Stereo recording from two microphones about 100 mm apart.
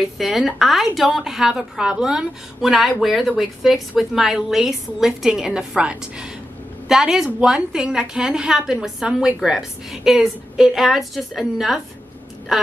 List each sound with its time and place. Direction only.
0.2 s a woman's voice: centre (ahead or behind)